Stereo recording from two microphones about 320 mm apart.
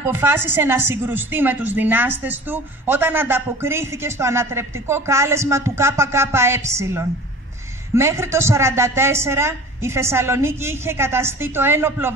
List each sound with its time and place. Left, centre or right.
0.0 s a woman's voice: centre